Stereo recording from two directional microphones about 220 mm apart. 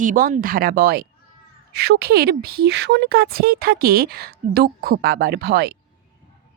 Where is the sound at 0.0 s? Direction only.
40° right (ahead or behind).